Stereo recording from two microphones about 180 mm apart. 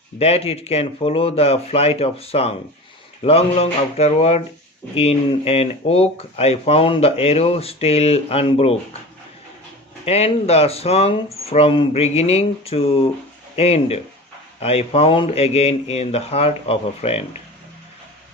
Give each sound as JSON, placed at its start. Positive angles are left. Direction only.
{"t": 0.2, "sound": "speech", "side_deg": 35}
{"t": 10.1, "sound": "speech", "side_deg": 35}